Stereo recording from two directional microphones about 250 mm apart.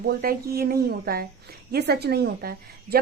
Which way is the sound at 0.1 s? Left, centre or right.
Right.